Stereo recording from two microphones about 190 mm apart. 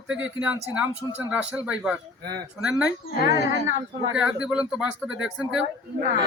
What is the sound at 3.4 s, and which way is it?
Speech, 60° left (ahead or behind).